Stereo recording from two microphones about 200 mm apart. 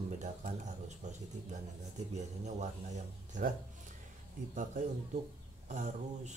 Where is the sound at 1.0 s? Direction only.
35° right (ahead or behind).